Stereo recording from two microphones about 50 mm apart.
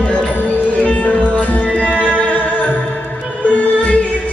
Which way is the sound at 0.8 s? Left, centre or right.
Left.